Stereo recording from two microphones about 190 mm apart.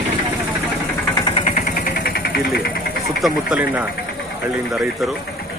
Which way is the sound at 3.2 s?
5° right (ahead or behind).